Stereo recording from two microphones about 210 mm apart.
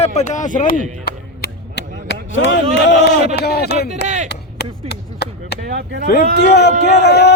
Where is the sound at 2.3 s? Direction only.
65° left (ahead or behind).